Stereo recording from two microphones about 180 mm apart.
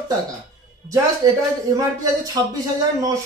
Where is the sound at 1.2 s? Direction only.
20° right (ahead or behind).